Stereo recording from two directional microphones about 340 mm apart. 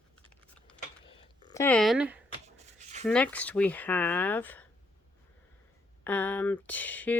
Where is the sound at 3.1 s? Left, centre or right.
Centre.